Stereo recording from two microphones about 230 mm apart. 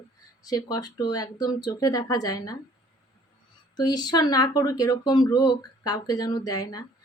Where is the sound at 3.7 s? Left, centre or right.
Centre.